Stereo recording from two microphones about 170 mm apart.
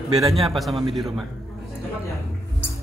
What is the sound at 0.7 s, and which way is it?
Speech, 30° right (ahead or behind).